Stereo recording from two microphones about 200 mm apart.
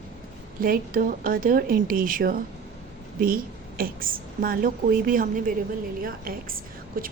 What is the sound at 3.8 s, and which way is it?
A woman's voice, 45° right (ahead or behind).